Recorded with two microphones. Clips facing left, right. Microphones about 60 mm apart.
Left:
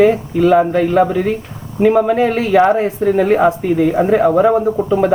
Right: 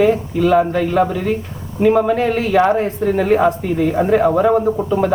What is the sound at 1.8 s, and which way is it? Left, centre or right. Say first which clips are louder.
Speech: left 2 dB; centre.